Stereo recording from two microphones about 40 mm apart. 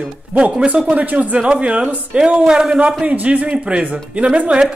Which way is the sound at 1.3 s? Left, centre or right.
Right.